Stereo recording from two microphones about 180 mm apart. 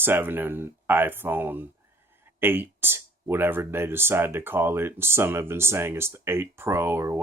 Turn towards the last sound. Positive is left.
turn(degrees=-15)  # may be behind; listen again after turning